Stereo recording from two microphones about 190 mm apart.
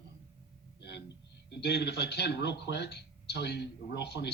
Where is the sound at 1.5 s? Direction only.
60° left (ahead or behind).